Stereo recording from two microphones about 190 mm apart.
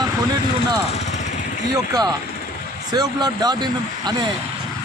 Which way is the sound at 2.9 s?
20° right (ahead or behind).